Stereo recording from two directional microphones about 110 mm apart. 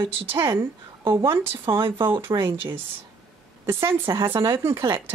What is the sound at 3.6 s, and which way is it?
Speech, 25° right (ahead or behind).